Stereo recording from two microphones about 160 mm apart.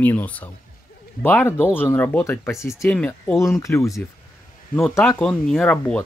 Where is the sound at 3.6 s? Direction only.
20° left (ahead or behind).